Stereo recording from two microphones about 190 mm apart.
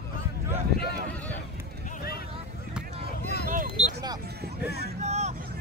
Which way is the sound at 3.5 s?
45° right (ahead or behind).